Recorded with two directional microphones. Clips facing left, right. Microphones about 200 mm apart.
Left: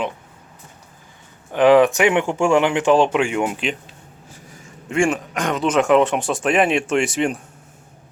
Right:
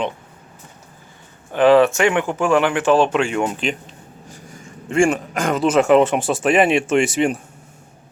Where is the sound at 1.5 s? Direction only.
15° left (ahead or behind).